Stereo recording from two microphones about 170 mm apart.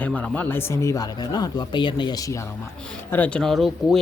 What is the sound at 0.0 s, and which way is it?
Speech, 10° left (ahead or behind).